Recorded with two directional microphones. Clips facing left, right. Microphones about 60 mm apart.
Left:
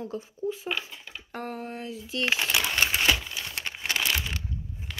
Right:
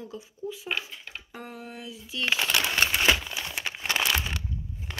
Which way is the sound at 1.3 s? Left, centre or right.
Left.